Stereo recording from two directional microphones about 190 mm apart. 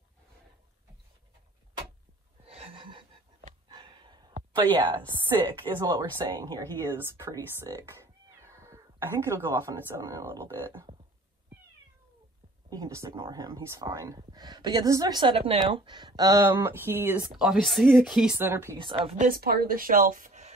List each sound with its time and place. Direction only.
2.4 s wheeze: 30° right (ahead or behind)
3.6 s a sound: 25° right (ahead or behind)
4.6 s a woman's voice: 25° right (ahead or behind)
12.6 s a woman's voice: 20° right (ahead or behind)
17.4 s speech: centre (ahead or behind)
18.8 s a woman's voice: 25° right (ahead or behind)
19.1 s speech: 45° right (ahead or behind)